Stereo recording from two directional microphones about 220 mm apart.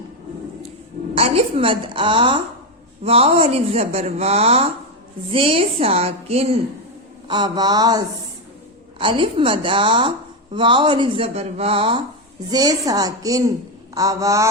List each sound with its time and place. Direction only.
1.1 s a woman's voice: 25° right (ahead or behind)